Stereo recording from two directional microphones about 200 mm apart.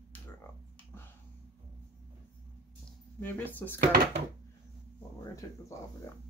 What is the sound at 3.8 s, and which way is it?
Speech, 50° right (ahead or behind).